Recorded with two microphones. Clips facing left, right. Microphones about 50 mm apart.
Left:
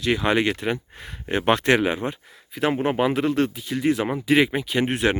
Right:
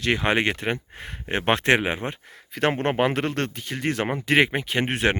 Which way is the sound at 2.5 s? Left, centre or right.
Right.